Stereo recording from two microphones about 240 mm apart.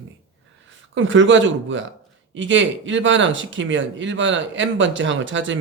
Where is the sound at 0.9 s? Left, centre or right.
Right.